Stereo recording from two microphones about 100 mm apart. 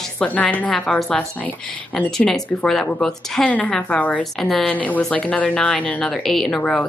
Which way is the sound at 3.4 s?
15° left (ahead or behind).